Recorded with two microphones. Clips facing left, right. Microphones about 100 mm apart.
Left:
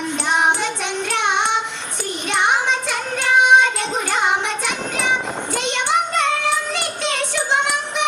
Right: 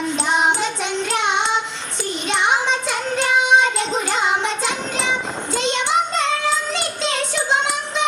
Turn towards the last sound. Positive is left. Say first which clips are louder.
# even
turn(degrees=-20)  # may be behind; listen again after turning